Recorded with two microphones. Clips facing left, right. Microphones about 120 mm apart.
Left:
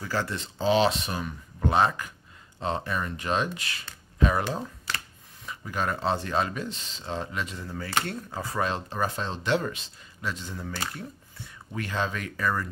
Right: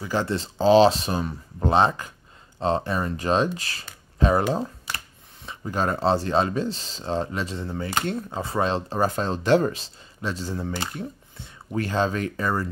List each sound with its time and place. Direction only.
0.0 s speech: 25° right (ahead or behind)
10.8 s speech: 25° right (ahead or behind)